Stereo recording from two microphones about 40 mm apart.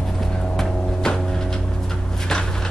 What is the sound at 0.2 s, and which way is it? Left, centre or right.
Vehicle, centre.